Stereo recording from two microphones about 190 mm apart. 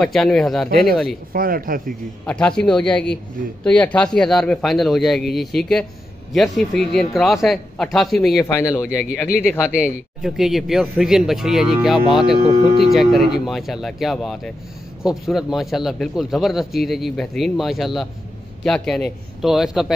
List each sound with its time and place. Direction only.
0.0 s a man's voice: centre (ahead or behind)
0.7 s speech: 55° right (ahead or behind)
2.2 s a man's voice: 5° left (ahead or behind)
8.4 s speech: 15° left (ahead or behind)
9.8 s a man's voice: 5° right (ahead or behind)